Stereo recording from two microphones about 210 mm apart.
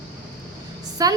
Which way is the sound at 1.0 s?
15° right (ahead or behind).